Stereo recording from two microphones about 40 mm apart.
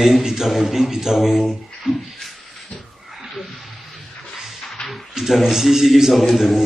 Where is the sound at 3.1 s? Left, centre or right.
Centre.